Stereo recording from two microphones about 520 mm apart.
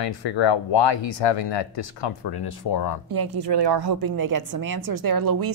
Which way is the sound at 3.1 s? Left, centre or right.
Right.